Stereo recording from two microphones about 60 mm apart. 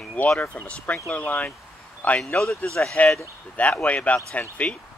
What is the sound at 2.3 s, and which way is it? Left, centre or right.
Speech, centre.